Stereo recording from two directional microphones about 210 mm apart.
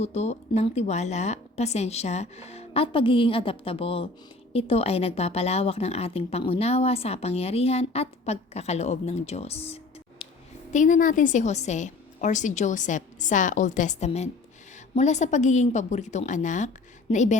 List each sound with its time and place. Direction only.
0.0 s a woman's voice: 30° left (ahead or behind)